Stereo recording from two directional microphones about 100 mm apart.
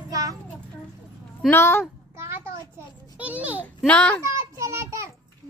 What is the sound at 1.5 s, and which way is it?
Speech, 25° left (ahead or behind).